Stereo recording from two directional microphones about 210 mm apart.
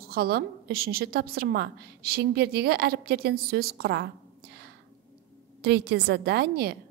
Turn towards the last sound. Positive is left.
turn(degrees=-50)  # may be behind; listen again after turning